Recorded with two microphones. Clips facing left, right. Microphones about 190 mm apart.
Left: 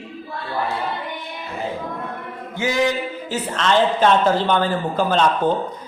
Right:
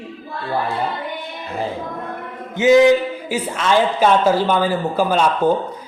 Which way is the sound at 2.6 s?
20° right (ahead or behind).